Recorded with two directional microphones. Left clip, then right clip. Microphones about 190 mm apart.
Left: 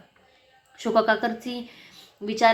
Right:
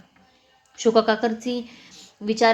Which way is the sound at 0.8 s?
30° right (ahead or behind).